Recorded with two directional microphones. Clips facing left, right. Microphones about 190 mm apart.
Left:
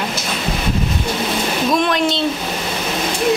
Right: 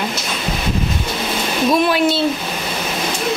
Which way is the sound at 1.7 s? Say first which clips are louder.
Right 3 dB; 5° right (ahead or behind).